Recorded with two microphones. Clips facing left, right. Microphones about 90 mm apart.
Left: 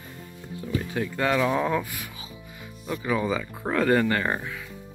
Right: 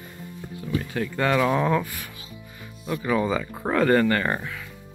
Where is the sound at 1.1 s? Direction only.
Centre (ahead or behind).